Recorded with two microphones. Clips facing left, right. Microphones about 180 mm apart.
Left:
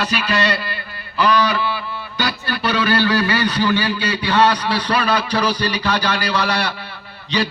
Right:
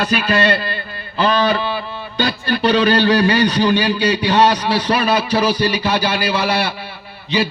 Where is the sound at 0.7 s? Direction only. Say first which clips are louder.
Right 4 dB; 25° right (ahead or behind); by 6.7 s 10° right (ahead or behind).